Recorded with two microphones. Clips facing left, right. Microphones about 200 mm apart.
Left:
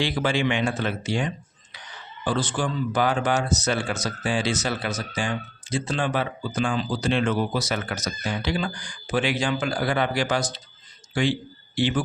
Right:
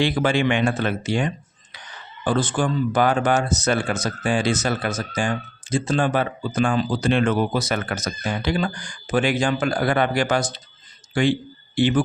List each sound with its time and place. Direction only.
0.0 s speech: 55° right (ahead or behind)